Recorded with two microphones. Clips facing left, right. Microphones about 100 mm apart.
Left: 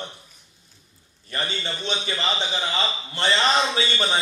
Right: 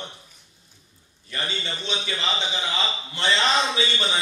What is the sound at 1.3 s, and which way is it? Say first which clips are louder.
A man's voice: left 2 dB; 40° left (ahead or behind).